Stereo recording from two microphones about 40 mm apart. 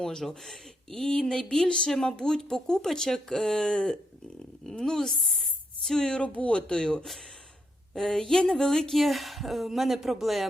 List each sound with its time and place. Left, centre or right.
0.0 s speech: centre
6.0 s speech: left
6.2 s speech: left
7.9 s speech: centre